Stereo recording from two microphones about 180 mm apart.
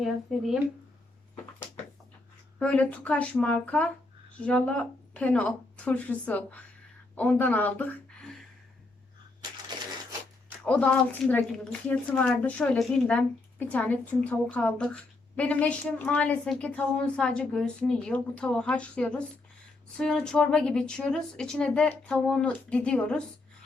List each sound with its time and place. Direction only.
0.0 s speech: centre (ahead or behind)
2.6 s a woman's voice: 5° left (ahead or behind)
9.4 s a sound: 25° right (ahead or behind)
10.6 s a woman's voice: 5° left (ahead or behind)